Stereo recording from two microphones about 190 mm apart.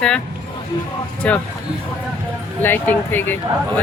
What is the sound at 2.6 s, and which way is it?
Speech, 10° left (ahead or behind).